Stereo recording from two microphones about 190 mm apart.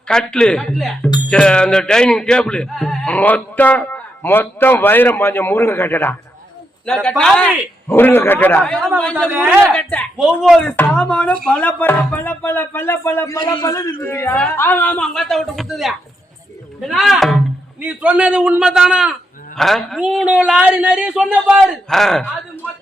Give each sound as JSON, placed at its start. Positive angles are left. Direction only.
{"t": 0.1, "sound": "a man's voice", "side_deg": 5}
{"t": 9.3, "sound": "a man's voice", "side_deg": -10}
{"t": 9.6, "sound": "a man's voice", "side_deg": 5}